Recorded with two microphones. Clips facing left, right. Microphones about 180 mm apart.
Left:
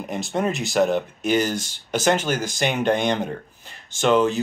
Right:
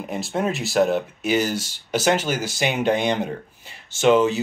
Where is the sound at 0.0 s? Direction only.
Centre (ahead or behind).